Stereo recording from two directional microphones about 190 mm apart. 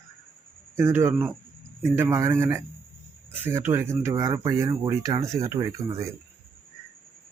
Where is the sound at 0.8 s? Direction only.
15° right (ahead or behind).